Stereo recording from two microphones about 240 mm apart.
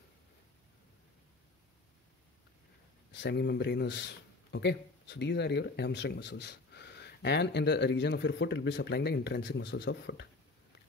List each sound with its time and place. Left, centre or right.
3.1 s speech: left